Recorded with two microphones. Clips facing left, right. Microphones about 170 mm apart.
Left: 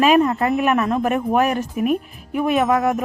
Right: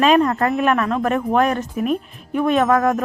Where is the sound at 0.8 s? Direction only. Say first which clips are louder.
Even; 15° left (ahead or behind).